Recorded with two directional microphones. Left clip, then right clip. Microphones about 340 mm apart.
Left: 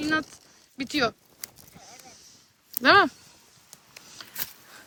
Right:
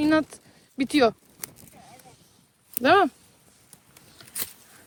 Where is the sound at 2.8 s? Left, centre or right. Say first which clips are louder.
Left 1 dB; centre.